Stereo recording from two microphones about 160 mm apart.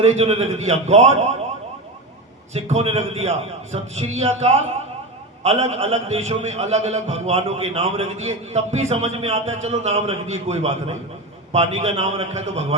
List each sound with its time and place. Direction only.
0.0 s a man's voice: 40° right (ahead or behind)
2.5 s a man's voice: 40° right (ahead or behind)